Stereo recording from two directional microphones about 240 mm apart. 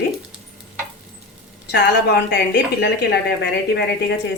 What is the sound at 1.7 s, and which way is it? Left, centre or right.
A woman's voice, left.